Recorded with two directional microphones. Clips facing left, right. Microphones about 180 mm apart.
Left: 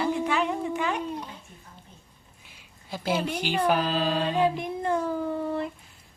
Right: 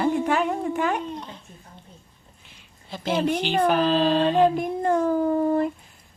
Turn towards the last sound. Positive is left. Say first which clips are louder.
# right 8 dB
turn(degrees=-45)  # may be behind; listen again after turning